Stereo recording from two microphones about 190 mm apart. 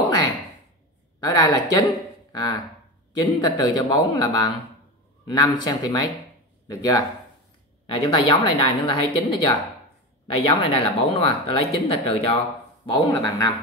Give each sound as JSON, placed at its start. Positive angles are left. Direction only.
{"t": 1.2, "sound": "speech", "side_deg": 20}